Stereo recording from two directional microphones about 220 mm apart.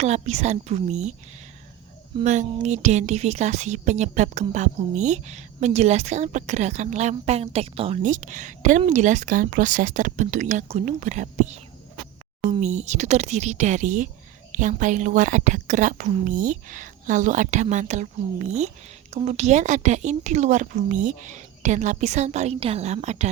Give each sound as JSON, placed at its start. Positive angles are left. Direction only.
{"t": 0.0, "sound": "a woman's voice", "side_deg": -30}
{"t": 2.2, "sound": "a woman's voice", "side_deg": -35}